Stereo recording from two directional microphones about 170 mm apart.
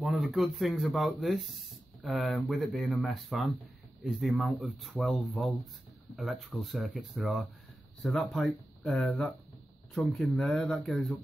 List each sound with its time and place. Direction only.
0.0 s speech: centre (ahead or behind)